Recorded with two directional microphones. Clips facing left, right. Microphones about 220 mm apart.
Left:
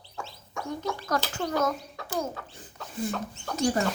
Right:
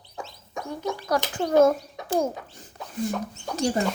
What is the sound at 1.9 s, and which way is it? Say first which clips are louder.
Speech: right 7 dB; 20° right (ahead or behind).